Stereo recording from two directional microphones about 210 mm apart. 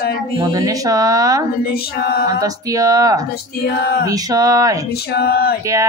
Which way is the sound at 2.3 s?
15° right (ahead or behind).